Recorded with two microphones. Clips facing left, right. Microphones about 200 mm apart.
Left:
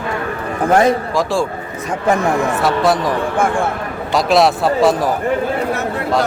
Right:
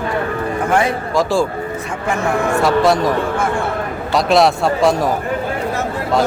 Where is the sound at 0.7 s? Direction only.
40° left (ahead or behind).